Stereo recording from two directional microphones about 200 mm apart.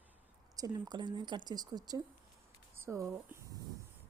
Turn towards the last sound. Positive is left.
turn(degrees=-15)  # may be behind; listen again after turning